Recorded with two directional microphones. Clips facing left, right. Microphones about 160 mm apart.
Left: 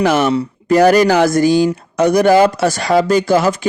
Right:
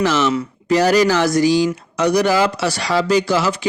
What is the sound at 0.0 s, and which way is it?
Speech, 55° left (ahead or behind).